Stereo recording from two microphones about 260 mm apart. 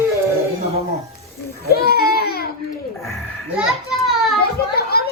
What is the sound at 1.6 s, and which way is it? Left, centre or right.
Baby cry, left.